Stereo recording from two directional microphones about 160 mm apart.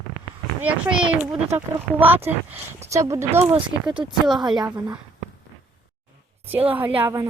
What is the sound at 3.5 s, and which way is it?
A woman's voice, 30° right (ahead or behind).